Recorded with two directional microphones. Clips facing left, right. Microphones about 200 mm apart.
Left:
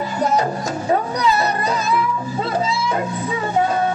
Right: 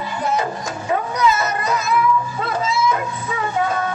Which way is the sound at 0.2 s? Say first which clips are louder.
Left 3 dB; 40° left (ahead or behind).